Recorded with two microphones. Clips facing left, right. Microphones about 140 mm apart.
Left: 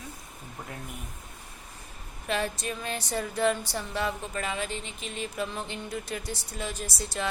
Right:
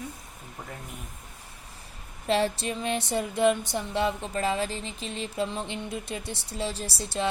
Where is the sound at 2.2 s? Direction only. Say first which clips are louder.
Right 5 dB; 30° right (ahead or behind).